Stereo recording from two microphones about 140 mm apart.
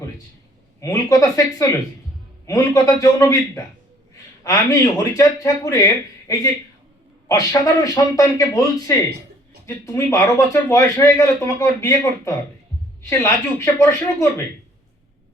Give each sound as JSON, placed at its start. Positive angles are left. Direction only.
{"t": 0.8, "sound": "speech", "side_deg": 25}